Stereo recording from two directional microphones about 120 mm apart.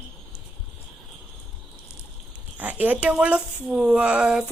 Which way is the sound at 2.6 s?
15° right (ahead or behind).